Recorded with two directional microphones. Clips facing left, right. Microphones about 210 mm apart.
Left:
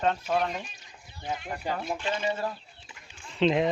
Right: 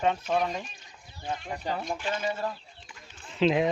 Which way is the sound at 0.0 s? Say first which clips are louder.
Even; centre (ahead or behind).